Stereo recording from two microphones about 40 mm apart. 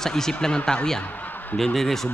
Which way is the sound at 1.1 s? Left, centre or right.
Left.